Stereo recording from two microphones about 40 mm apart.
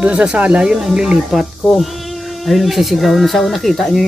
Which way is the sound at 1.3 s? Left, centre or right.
Centre.